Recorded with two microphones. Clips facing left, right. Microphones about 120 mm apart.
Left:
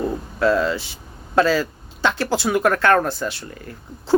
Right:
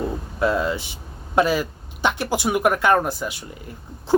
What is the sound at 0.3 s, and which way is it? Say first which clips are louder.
Speech: left 3 dB; 20° right (ahead or behind).